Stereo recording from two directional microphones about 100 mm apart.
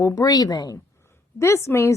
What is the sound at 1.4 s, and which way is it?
Speech, 25° left (ahead or behind).